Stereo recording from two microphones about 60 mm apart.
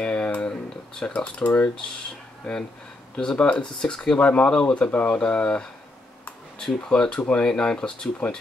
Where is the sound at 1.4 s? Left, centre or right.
Left.